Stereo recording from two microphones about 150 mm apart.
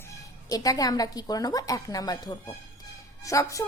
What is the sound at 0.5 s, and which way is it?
A child's voice, 25° left (ahead or behind).